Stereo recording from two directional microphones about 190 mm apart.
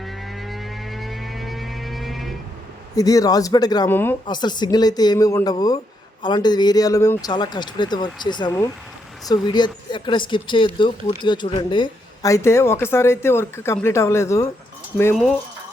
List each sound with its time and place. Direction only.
0.0 s music: centre (ahead or behind)
2.9 s speech: 20° left (ahead or behind)
4.3 s speech: 25° left (ahead or behind)
15.1 s speech: centre (ahead or behind)